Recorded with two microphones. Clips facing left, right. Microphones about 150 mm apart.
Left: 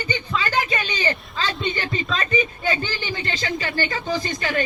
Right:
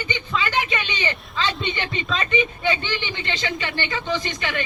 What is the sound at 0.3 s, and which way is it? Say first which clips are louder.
Speech: even; 40° left (ahead or behind).